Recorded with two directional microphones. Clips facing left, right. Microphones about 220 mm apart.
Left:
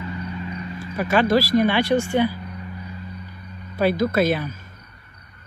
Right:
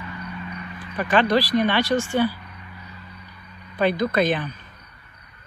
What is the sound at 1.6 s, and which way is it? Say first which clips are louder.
Speech: left 2 dB; 10° left (ahead or behind).